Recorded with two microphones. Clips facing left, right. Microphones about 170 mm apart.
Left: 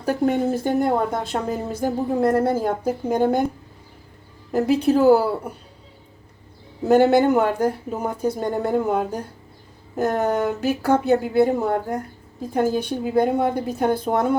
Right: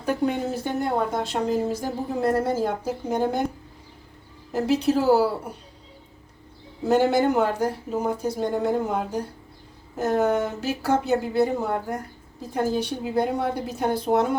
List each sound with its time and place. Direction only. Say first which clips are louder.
0.0 s a woman's voice: left 4 dB; 45° left (ahead or behind)
4.5 s speech: left 4 dB; 55° left (ahead or behind)
6.8 s speech: left 4 dB; 55° left (ahead or behind)
10.0 s a woman's voice: left 1 dB; 55° left (ahead or behind)